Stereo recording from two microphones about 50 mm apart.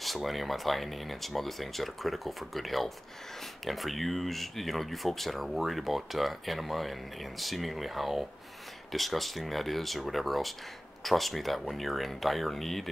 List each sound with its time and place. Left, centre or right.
0.0 s speech: centre